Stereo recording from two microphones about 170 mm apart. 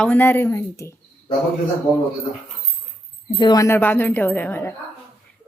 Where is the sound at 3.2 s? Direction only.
25° left (ahead or behind).